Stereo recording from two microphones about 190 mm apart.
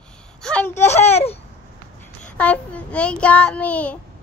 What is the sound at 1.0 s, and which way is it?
Child singing, 35° left (ahead or behind).